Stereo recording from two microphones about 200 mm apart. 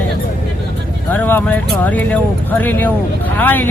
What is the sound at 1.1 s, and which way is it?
Speech, 10° left (ahead or behind).